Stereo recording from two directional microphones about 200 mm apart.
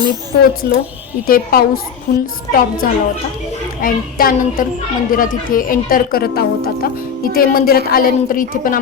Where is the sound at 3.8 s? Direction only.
45° left (ahead or behind).